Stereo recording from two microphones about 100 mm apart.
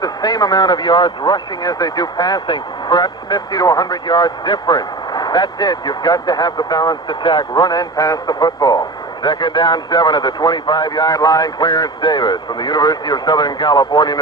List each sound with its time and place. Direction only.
0.0 s speech: 40° left (ahead or behind)